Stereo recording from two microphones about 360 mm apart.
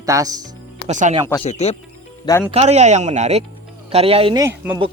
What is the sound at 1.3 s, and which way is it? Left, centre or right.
Speech, centre.